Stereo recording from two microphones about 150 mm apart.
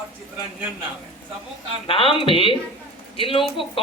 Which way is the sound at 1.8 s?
35° left (ahead or behind).